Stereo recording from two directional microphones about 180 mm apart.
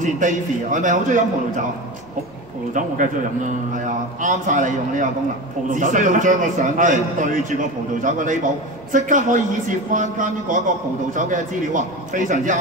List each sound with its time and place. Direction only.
0.0 s a man's voice: 45° right (ahead or behind)
2.7 s a man's voice: 45° right (ahead or behind)